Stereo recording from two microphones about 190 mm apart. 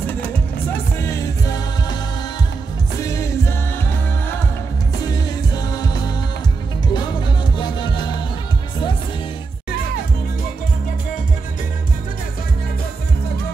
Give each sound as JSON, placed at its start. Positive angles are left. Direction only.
{"t": 0.9, "sound": "music", "side_deg": 15}
{"t": 3.0, "sound": "music", "side_deg": 15}
{"t": 5.8, "sound": "music", "side_deg": 20}